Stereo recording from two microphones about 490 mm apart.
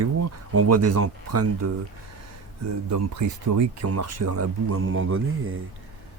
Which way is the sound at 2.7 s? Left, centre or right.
Right.